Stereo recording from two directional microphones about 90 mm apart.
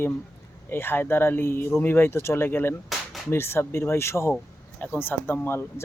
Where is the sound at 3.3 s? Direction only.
25° left (ahead or behind).